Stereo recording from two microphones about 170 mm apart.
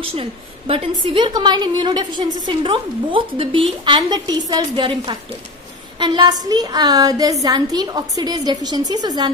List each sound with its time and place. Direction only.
0.0 s a woman's voice: 30° right (ahead or behind)